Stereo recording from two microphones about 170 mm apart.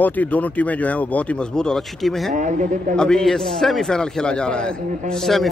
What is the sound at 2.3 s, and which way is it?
Speech, 45° right (ahead or behind).